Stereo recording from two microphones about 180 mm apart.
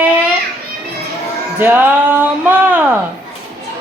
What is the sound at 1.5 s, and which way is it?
Speech, 10° right (ahead or behind).